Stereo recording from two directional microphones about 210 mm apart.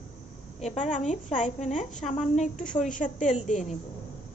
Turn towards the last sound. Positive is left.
turn(degrees=35)  # may be behind; listen again after turning